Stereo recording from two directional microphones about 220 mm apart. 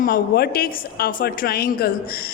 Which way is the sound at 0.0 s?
40° left (ahead or behind).